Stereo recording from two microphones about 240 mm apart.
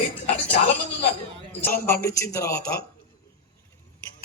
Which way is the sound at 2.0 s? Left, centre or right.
Centre.